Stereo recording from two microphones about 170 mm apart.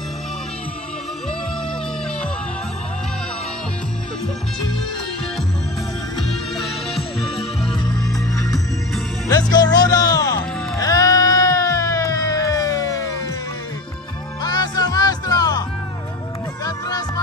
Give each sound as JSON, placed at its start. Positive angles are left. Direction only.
{"t": 6.2, "sound": "music", "side_deg": 0}
{"t": 7.3, "sound": "music", "side_deg": 35}
{"t": 7.9, "sound": "music", "side_deg": 0}
{"t": 9.3, "sound": "music", "side_deg": 25}
{"t": 14.4, "sound": "music", "side_deg": 25}
{"t": 16.6, "sound": "music", "side_deg": 20}